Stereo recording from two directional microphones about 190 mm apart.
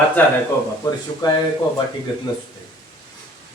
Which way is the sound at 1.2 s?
20° left (ahead or behind).